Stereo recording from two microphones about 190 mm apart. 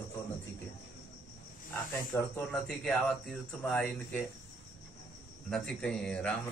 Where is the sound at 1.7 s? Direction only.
10° left (ahead or behind).